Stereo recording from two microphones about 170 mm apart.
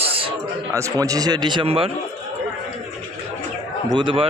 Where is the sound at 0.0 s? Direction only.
35° right (ahead or behind).